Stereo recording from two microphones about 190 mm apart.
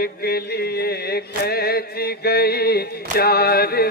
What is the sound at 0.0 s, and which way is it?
Chant, 55° left (ahead or behind).